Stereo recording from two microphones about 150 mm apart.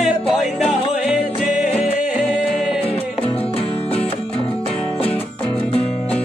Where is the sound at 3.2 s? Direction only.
40° left (ahead or behind).